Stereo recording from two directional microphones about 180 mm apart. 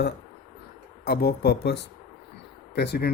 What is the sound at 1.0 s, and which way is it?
Speech, 60° left (ahead or behind).